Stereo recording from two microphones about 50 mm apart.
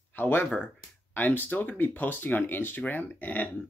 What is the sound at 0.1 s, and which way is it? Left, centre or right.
Speech, left.